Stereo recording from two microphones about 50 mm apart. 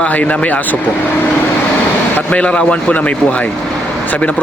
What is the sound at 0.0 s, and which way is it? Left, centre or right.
Speech, left.